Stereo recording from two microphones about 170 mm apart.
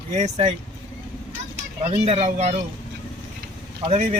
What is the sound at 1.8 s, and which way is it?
Speech, 40° right (ahead or behind).